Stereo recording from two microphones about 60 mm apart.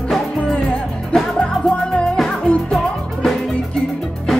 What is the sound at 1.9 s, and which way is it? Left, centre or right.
Music, centre.